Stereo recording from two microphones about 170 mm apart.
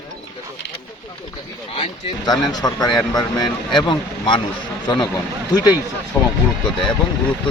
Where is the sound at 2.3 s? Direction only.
25° left (ahead or behind).